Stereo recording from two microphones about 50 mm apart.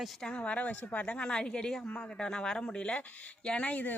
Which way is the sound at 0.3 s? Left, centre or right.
Left.